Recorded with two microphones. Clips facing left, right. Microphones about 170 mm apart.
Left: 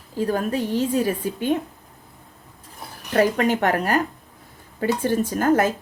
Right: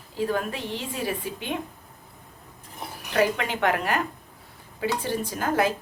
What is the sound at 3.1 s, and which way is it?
A woman's voice, 45° left (ahead or behind).